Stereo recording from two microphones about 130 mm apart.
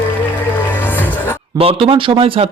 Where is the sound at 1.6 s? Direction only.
45° right (ahead or behind).